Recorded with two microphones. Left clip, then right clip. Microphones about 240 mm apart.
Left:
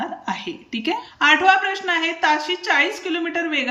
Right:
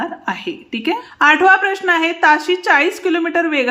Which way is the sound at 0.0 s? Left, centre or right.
Centre.